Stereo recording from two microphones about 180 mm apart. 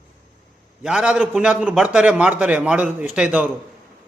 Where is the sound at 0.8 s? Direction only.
5° right (ahead or behind).